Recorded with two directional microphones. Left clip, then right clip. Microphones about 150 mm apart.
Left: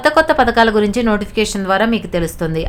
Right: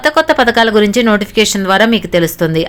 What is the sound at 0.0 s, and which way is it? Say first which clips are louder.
Speech: right 2 dB; 25° right (ahead or behind).